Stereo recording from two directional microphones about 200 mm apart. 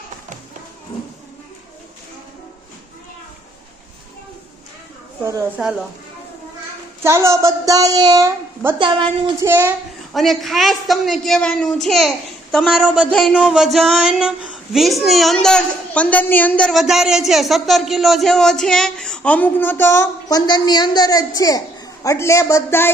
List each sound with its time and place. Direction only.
5.6 s a woman's voice: 10° right (ahead or behind)
7.0 s a woman's voice: 15° right (ahead or behind)
9.4 s a woman's voice: 10° right (ahead or behind)
10.1 s speech: centre (ahead or behind)